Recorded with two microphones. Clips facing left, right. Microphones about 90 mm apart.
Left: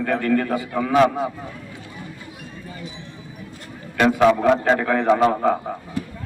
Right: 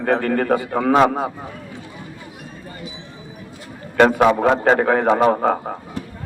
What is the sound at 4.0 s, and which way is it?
A man's voice, 45° right (ahead or behind).